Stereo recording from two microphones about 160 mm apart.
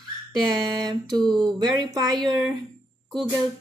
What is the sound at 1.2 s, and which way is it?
Speech, 5° left (ahead or behind).